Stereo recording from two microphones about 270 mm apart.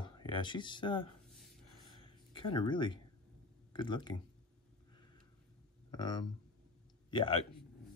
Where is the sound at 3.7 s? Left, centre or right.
Centre.